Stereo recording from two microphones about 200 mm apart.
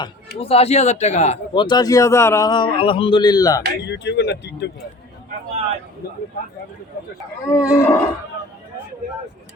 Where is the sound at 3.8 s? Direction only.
60° left (ahead or behind).